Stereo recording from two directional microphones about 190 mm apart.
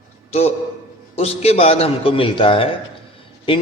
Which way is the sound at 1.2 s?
35° left (ahead or behind).